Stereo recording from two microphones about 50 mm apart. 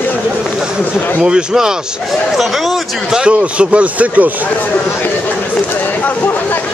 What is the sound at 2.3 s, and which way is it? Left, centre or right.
Speech, centre.